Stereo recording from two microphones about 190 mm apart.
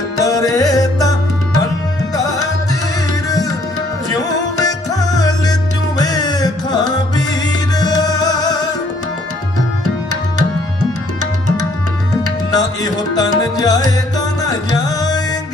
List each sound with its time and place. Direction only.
0.2 s music: 20° left (ahead or behind)
4.1 s music: 20° left (ahead or behind)
12.1 s music: 20° left (ahead or behind)